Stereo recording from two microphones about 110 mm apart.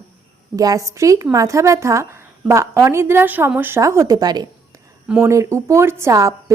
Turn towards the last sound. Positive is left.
turn(degrees=-30)  # may be behind; listen again after turning